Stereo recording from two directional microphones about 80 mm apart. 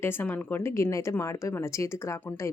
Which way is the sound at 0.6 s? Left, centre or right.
Left.